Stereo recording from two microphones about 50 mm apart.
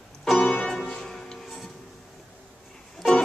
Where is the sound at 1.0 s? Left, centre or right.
Centre.